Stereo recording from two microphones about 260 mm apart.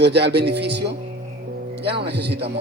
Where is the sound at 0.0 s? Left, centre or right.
Right.